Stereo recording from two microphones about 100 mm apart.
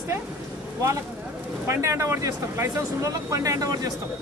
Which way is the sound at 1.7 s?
30° right (ahead or behind).